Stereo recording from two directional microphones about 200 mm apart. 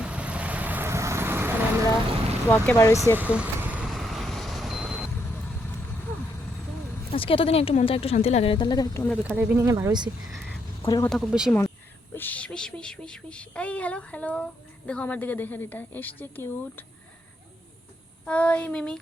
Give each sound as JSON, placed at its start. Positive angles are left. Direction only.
{"t": 0.0, "sound": "vehicle", "side_deg": -5}
{"t": 2.5, "sound": "music", "side_deg": 15}
{"t": 3.2, "sound": "vehicle", "side_deg": -5}
{"t": 7.1, "sound": "speech", "side_deg": 25}
{"t": 9.2, "sound": "speech", "side_deg": -10}
{"t": 10.3, "sound": "a sound", "side_deg": 0}
{"t": 10.8, "sound": "speech", "side_deg": 20}
{"t": 11.1, "sound": "speech", "side_deg": -5}
{"t": 12.1, "sound": "music", "side_deg": 10}
{"t": 18.3, "sound": "music", "side_deg": 5}